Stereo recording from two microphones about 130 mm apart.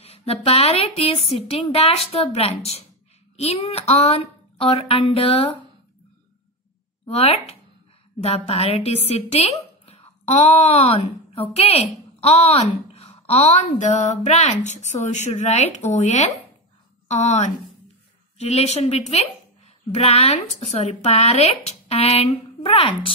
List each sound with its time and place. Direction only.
0.0 s speech: 50° left (ahead or behind)
7.1 s speech: 50° left (ahead or behind)